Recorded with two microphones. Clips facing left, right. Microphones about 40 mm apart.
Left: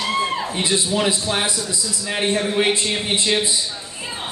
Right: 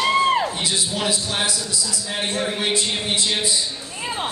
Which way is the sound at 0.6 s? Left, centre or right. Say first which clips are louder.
Left 4 dB; left.